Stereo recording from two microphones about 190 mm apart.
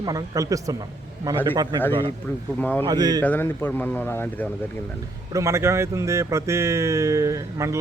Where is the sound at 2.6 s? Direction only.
10° left (ahead or behind).